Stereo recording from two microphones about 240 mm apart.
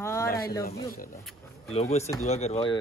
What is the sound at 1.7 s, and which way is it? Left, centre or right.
Speech, left.